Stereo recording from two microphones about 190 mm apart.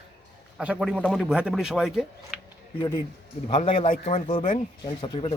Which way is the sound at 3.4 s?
25° left (ahead or behind).